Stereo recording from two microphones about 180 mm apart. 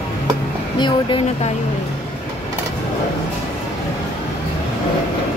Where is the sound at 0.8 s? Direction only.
25° left (ahead or behind).